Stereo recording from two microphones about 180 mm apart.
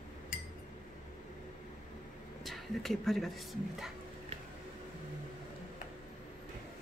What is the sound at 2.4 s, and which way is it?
Speech, centre (ahead or behind).